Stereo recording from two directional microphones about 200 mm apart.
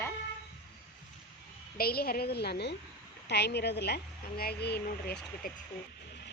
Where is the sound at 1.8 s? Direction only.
50° left (ahead or behind).